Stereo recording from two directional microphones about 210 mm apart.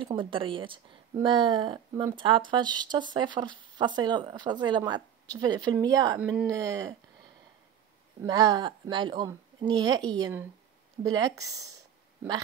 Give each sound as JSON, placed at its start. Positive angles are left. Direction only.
{"t": 0.0, "sound": "speech", "side_deg": -25}
{"t": 8.2, "sound": "speech", "side_deg": -15}